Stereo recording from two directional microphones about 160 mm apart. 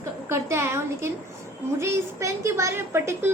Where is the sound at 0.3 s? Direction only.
15° right (ahead or behind).